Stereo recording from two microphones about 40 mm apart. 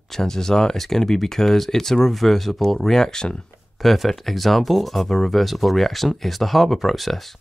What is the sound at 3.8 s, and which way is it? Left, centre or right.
Speech, centre.